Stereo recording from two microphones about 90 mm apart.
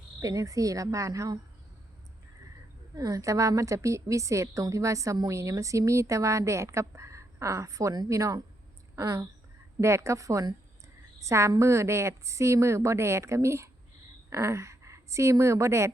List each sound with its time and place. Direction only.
0.2 s a woman's voice: 40° right (ahead or behind)
2.9 s a woman's voice: 40° right (ahead or behind)